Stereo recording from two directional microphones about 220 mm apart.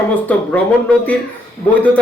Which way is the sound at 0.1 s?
5° left (ahead or behind).